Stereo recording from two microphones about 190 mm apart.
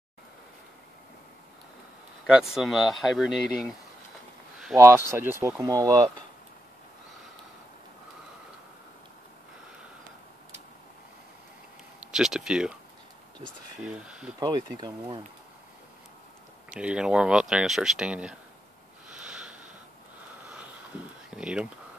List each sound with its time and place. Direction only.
2.2 s speech: 5° right (ahead or behind)
4.7 s speech: 15° right (ahead or behind)
12.1 s speech: centre (ahead or behind)
13.8 s speech: 5° right (ahead or behind)
14.4 s speech: 20° right (ahead or behind)
16.7 s speech: 5° right (ahead or behind)
19.0 s sniff: 5° right (ahead or behind)
21.3 s speech: 5° right (ahead or behind)